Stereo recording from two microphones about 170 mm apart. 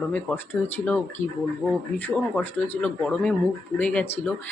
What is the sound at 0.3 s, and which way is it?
Speech, 10° left (ahead or behind).